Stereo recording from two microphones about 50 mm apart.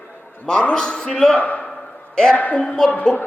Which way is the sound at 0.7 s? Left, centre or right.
Centre.